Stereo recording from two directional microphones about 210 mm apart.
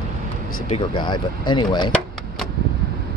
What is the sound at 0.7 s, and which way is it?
Speech, 20° left (ahead or behind).